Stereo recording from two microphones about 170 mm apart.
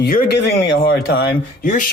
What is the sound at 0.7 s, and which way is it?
Speech, 80° left.